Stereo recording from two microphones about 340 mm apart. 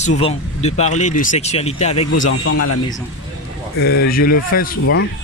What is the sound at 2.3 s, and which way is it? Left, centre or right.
Speech, left.